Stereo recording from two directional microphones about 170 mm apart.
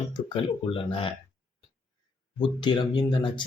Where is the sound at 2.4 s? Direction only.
25° left (ahead or behind).